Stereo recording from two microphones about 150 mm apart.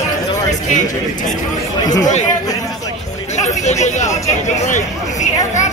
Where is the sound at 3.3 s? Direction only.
50° left (ahead or behind).